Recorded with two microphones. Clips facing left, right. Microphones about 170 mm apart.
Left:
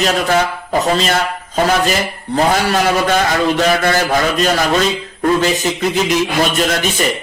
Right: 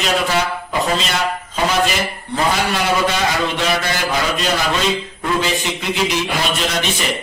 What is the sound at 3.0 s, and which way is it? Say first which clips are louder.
Speech: left 4 dB; 45° left (ahead or behind).